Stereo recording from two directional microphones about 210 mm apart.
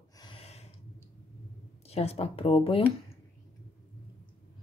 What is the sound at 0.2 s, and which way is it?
Gasp, 25° left (ahead or behind).